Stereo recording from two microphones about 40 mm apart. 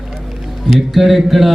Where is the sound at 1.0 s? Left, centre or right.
Centre.